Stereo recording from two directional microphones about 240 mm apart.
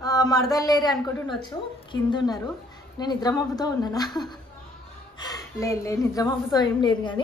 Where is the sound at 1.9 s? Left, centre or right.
Centre.